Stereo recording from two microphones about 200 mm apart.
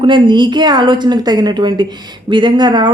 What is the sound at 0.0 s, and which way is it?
Speech, 25° right (ahead or behind).